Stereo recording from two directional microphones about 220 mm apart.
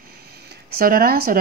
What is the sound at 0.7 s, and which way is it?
Speech, 40° right (ahead or behind).